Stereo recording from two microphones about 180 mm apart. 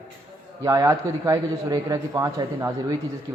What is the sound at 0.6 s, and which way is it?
Speech, 20° right (ahead or behind).